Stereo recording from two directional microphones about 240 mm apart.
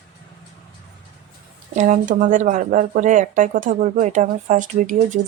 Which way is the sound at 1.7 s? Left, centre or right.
Right.